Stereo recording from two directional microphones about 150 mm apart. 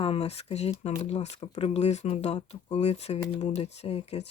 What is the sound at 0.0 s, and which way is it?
Speech, 40° left (ahead or behind).